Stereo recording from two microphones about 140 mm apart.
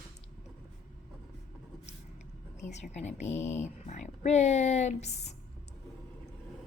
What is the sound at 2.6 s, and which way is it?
Speech, 55° left (ahead or behind).